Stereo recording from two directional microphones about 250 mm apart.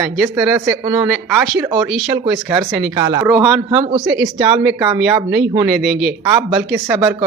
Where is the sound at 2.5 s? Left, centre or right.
Centre.